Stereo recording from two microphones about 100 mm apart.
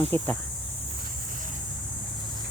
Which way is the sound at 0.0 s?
15° left (ahead or behind).